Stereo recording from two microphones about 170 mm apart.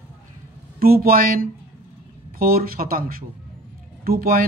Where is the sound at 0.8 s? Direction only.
60° right (ahead or behind).